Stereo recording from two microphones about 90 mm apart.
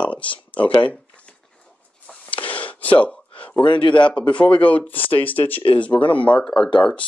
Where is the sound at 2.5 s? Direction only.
15° left (ahead or behind).